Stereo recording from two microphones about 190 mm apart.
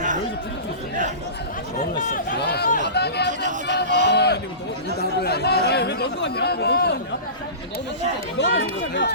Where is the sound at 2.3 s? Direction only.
60° left (ahead or behind).